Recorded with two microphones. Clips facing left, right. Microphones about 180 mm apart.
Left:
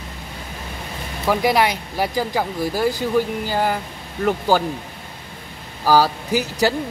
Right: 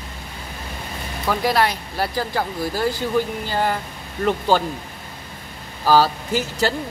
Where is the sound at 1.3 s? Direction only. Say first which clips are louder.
Left 2 dB; 15° left (ahead or behind).